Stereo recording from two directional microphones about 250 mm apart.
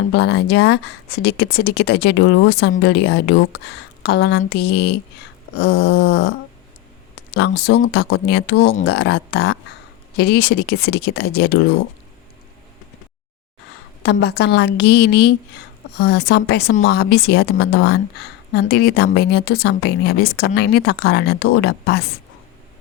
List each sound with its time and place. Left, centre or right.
0.1 s speech: left
14.0 s speech: left